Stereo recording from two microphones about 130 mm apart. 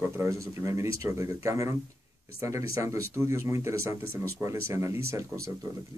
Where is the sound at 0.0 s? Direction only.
20° right (ahead or behind).